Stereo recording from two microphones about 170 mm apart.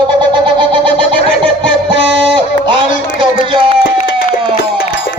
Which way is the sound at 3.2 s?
30° right (ahead or behind).